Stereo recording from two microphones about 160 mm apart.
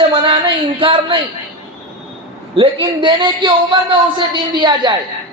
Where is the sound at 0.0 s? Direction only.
35° right (ahead or behind).